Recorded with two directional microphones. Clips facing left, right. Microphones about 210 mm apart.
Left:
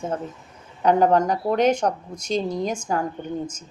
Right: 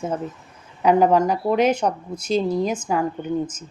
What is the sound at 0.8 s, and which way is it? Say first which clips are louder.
Speech: right 1 dB; 5° right (ahead or behind).